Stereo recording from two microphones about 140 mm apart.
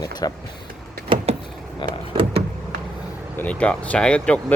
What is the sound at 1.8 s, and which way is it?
Power windows, 35° left (ahead or behind).